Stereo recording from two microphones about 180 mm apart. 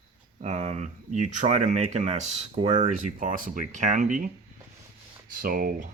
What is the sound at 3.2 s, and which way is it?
Speech, 50° right (ahead or behind).